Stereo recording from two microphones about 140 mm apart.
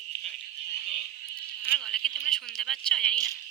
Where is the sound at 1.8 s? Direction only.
5° left (ahead or behind).